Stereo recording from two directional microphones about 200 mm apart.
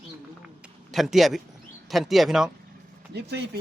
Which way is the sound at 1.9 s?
Centre (ahead or behind).